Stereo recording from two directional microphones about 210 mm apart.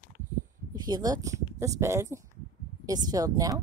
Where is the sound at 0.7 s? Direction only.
20° right (ahead or behind).